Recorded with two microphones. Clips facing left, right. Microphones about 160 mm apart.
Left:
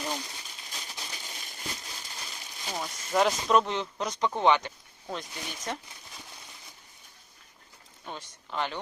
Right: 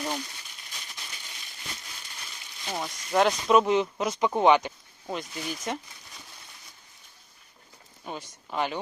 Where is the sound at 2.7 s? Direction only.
Centre (ahead or behind).